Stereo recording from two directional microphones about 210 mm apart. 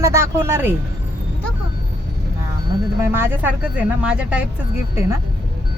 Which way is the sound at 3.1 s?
10° right (ahead or behind).